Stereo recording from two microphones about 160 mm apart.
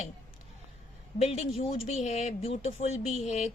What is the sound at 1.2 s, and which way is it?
A woman's voice, 40° left (ahead or behind).